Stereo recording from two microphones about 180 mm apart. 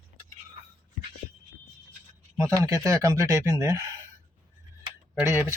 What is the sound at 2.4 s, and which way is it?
Speech, 20° right (ahead or behind).